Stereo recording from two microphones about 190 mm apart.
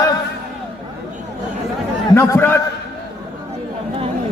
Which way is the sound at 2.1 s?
15° left (ahead or behind).